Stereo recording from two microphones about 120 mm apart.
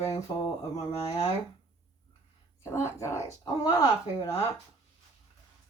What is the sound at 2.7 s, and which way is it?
Speech, 25° left (ahead or behind).